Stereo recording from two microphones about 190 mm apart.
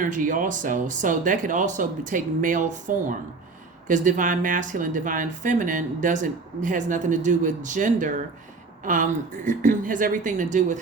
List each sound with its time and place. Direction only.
0.0 s speech: 45° right (ahead or behind)